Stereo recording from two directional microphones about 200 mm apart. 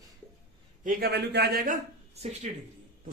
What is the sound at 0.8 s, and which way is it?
A man's voice, 55° right (ahead or behind).